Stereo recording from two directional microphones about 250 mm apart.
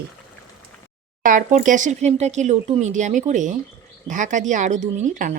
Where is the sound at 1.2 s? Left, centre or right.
Right.